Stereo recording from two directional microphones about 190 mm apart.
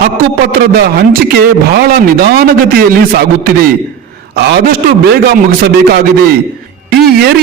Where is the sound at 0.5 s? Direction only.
55° right (ahead or behind).